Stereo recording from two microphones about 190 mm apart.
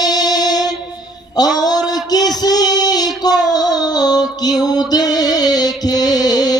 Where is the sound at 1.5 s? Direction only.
20° left (ahead or behind).